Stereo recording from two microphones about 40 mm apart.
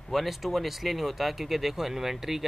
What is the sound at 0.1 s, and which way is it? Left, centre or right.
Speech, centre.